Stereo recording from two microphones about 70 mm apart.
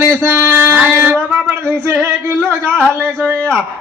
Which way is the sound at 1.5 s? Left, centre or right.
Right.